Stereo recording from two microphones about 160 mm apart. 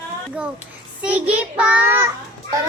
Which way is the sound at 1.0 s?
10° right (ahead or behind).